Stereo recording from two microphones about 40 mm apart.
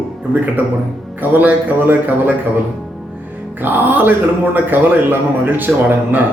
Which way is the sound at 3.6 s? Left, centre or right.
Right.